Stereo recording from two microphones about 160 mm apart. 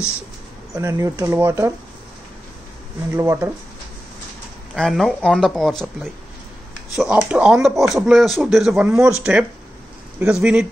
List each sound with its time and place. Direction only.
0.7 s speech: 20° right (ahead or behind)
3.1 s speech: 15° right (ahead or behind)
4.7 s speech: centre (ahead or behind)
7.0 s speech: 5° right (ahead or behind)